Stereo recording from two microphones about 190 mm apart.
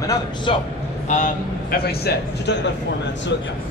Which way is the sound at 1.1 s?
40° left (ahead or behind).